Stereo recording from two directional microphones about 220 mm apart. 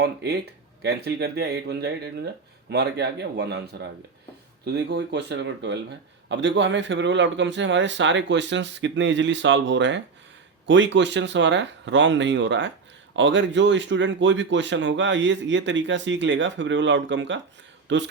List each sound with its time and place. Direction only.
0.0 s speech: 50° right (ahead or behind)